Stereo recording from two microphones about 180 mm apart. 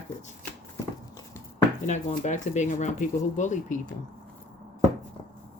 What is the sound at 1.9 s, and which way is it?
Speech, 40° left (ahead or behind).